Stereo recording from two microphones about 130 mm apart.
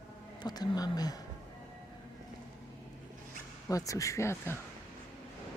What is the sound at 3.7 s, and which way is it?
Speech, 25° left (ahead or behind).